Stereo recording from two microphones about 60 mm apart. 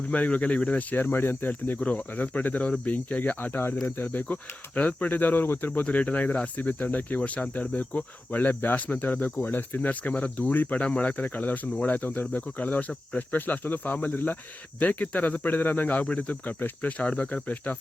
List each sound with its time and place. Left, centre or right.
0.1 s cricket: left
3.8 s speech: left
5.8 s cricket: left